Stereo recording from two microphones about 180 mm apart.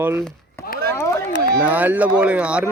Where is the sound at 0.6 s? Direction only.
15° left (ahead or behind).